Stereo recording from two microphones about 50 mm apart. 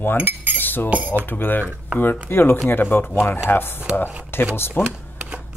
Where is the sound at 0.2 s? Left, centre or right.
Right.